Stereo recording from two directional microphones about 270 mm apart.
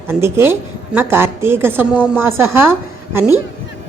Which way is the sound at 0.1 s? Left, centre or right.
Centre.